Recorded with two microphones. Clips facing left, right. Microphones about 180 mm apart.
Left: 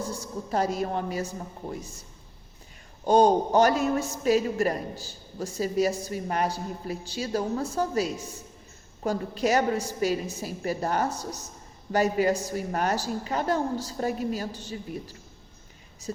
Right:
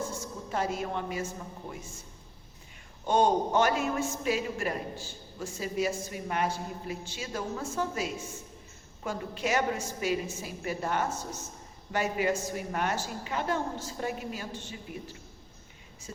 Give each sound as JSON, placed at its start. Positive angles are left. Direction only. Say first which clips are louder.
{"t": 0.0, "sound": "a woman's voice", "louder": "left 3 dB", "side_deg": 35}
{"t": 3.1, "sound": "a man's voice", "louder": "left 5 dB", "side_deg": 35}